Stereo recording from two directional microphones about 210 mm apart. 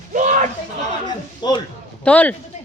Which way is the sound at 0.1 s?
35° right (ahead or behind).